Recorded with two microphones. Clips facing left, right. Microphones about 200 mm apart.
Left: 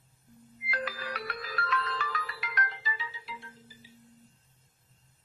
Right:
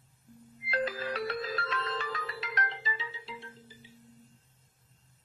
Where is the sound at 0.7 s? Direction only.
25° right (ahead or behind).